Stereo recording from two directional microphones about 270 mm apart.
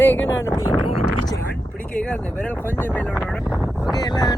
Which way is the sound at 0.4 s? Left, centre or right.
Centre.